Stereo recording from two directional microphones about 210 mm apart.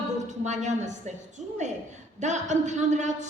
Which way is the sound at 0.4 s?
35° right (ahead or behind).